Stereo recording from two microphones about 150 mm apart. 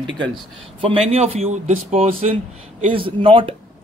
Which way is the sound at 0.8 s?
40° right (ahead or behind).